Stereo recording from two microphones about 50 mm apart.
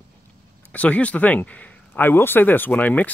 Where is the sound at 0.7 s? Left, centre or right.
Left.